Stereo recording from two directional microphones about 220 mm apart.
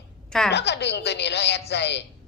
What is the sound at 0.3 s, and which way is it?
Speech, 5° left (ahead or behind).